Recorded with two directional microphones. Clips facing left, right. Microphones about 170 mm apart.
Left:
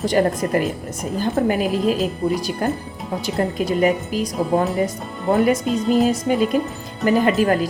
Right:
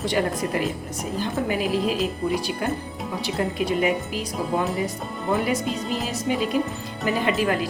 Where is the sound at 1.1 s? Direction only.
45° left (ahead or behind).